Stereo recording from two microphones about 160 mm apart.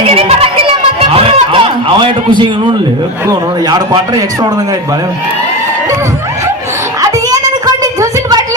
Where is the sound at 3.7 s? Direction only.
25° right (ahead or behind).